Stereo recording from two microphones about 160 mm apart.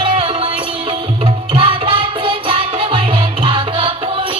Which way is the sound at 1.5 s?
35° right (ahead or behind).